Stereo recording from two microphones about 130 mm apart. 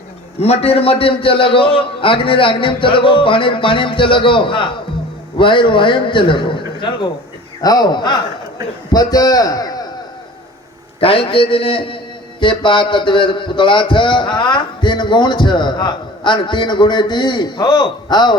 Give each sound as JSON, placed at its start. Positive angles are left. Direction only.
{"t": 0.3, "sound": "a man's voice", "side_deg": 50}
{"t": 11.0, "sound": "a man's voice", "side_deg": 45}